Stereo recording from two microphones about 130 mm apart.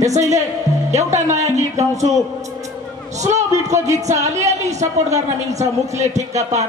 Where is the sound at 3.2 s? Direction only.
65° right (ahead or behind).